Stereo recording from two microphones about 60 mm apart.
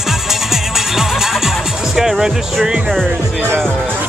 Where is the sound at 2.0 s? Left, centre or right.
Centre.